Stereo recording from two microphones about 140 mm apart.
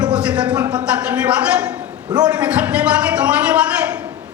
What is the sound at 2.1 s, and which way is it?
Speech, 30° right (ahead or behind).